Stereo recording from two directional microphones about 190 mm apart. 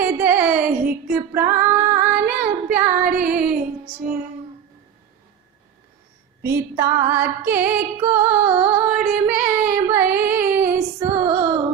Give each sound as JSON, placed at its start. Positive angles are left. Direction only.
{"t": 0.0, "sound": "female singing", "side_deg": -10}
{"t": 2.2, "sound": "child singing", "side_deg": -5}
{"t": 6.4, "sound": "music", "side_deg": -15}
{"t": 11.2, "sound": "music", "side_deg": -25}